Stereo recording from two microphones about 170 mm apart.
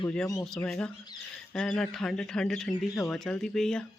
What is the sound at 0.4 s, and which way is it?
Speech, 5° left (ahead or behind).